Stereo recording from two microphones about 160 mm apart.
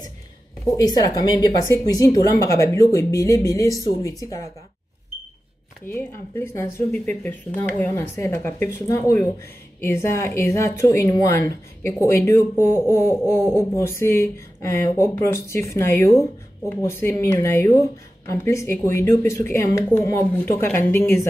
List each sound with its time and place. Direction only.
0.7 s speech: 25° left (ahead or behind)
5.9 s speech: 60° left (ahead or behind)
6.9 s speech: 10° left (ahead or behind)